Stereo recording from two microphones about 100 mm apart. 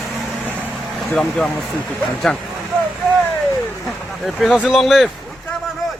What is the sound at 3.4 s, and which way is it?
Vehicle, centre (ahead or behind).